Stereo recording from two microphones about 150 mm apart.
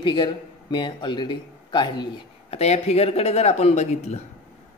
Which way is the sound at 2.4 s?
45° left (ahead or behind).